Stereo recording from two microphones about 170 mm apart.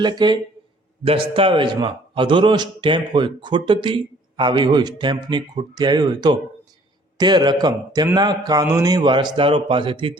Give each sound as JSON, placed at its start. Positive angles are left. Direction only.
{"t": 0.0, "sound": "a man's voice", "side_deg": -25}